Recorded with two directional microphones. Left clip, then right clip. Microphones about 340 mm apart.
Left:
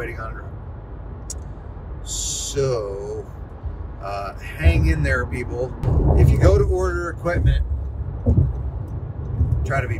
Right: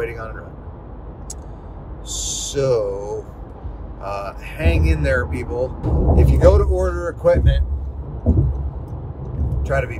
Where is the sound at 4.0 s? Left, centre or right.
Centre.